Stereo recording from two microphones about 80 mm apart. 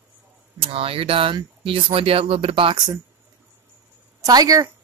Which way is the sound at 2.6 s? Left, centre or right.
Right.